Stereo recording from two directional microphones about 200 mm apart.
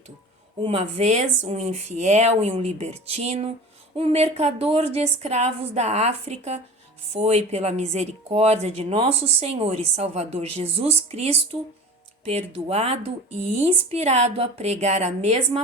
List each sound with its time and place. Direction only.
0.6 s speech: 30° right (ahead or behind)